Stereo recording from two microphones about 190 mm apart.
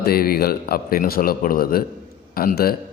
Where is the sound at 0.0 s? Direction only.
50° left (ahead or behind).